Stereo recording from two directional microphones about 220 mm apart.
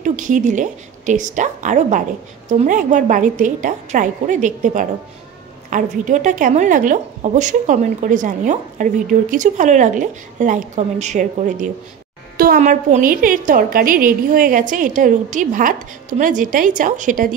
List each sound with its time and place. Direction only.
0.0 s a woman's voice: 35° right (ahead or behind)